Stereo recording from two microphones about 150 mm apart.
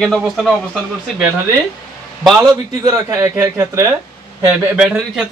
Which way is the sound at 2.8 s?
20° right (ahead or behind).